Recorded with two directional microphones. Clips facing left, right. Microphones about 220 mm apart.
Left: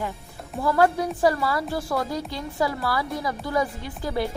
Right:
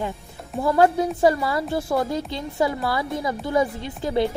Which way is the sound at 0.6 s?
25° right (ahead or behind).